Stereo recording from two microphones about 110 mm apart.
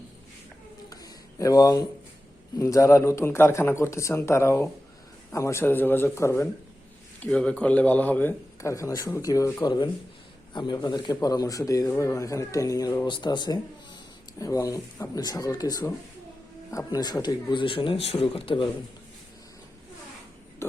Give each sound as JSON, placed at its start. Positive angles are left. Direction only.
{"t": 0.9, "sound": "a sound", "side_deg": 35}
{"t": 2.6, "sound": "a man's voice", "side_deg": 30}
{"t": 7.2, "sound": "speech", "side_deg": 10}
{"t": 8.6, "sound": "a man's voice", "side_deg": 30}
{"t": 9.6, "sound": "a man's voice", "side_deg": 40}
{"t": 13.1, "sound": "speech", "side_deg": 45}
{"t": 14.3, "sound": "a man's voice", "side_deg": 30}